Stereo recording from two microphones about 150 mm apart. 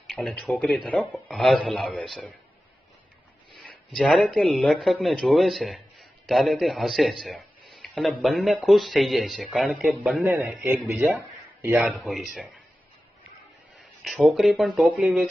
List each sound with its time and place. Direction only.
0.1 s speech: 5° left (ahead or behind)
3.5 s a man's voice: 5° left (ahead or behind)
11.9 s speech: centre (ahead or behind)
14.0 s speech: centre (ahead or behind)